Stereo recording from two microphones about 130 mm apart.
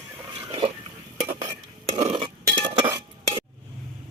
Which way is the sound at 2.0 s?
50° right (ahead or behind).